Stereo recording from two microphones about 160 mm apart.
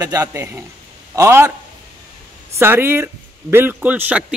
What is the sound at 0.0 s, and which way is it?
A man's voice, 20° right (ahead or behind).